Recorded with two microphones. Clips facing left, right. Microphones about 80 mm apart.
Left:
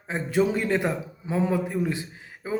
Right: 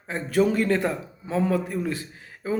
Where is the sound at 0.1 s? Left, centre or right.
Centre.